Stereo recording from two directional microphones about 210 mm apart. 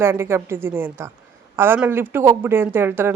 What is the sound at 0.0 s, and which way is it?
Speech, 10° right (ahead or behind).